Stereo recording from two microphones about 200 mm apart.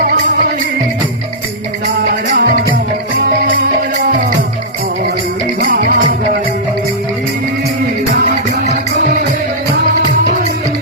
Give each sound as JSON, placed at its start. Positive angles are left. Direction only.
{"t": 2.3, "sound": "music", "side_deg": -50}
{"t": 5.5, "sound": "music", "side_deg": -45}